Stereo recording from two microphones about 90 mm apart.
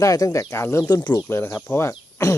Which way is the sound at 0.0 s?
40° left (ahead or behind).